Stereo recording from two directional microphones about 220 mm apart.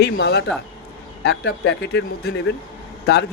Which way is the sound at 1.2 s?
60° left (ahead or behind).